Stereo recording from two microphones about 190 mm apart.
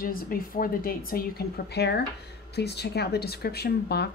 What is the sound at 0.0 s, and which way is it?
Speech, 50° left (ahead or behind).